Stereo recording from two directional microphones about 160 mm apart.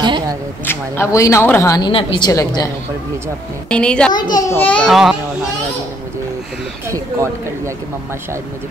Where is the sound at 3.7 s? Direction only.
5° left (ahead or behind).